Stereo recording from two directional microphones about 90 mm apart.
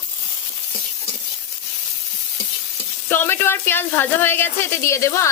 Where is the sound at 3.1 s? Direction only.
25° left (ahead or behind).